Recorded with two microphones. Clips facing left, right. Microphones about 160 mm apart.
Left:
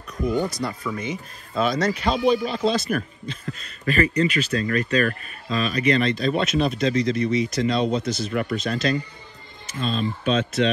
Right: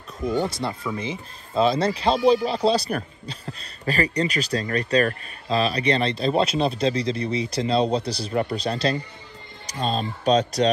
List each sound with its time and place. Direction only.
0.3 s speech: 25° right (ahead or behind)